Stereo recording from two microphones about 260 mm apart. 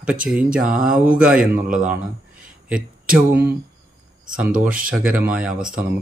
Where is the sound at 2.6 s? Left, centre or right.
Centre.